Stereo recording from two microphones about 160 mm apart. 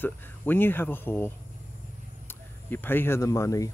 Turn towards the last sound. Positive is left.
turn(degrees=20)  # may be behind; listen again after turning